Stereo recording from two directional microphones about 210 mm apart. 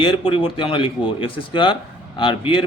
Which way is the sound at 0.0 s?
25° left (ahead or behind).